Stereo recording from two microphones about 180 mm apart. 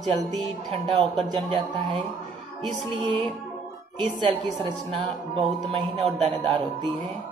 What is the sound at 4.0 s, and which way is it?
Speech, 25° right (ahead or behind).